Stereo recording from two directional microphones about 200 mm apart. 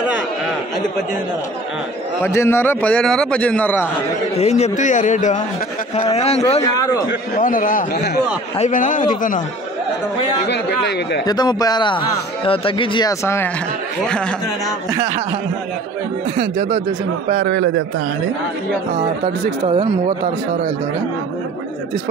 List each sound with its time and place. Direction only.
2.2 s a man's voice: 10° left (ahead or behind)
4.4 s a man's voice: 35° left (ahead or behind)
6.6 s a man's voice: 15° left (ahead or behind)
7.3 s a man's voice: 45° left (ahead or behind)
8.5 s a man's voice: 40° left (ahead or behind)
10.5 s speech: 55° left (ahead or behind)
11.2 s speech: 20° left (ahead or behind); by 14.3 s 5° left (ahead or behind)
16.3 s speech: 35° right (ahead or behind)
17.4 s a man's voice: 60° right (ahead or behind)
19.6 s speech: 30° right (ahead or behind)